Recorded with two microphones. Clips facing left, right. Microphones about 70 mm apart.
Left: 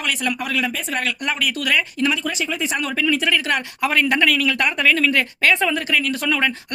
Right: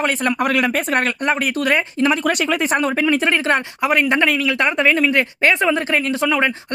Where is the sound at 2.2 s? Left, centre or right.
Right.